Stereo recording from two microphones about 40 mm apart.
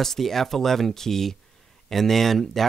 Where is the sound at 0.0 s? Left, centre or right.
Centre.